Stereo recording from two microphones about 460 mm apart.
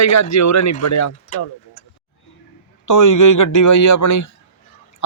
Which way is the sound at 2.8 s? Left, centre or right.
Left.